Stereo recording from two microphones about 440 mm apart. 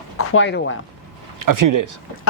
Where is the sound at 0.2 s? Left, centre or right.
Left.